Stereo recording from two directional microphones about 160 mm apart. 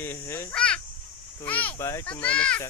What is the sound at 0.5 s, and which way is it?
A child's voice, 5° left (ahead or behind).